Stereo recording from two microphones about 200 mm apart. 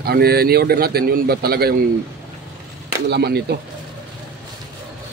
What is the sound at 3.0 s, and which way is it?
Speech, 55° right (ahead or behind).